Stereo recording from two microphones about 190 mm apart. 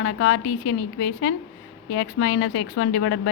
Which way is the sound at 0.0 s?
80° left.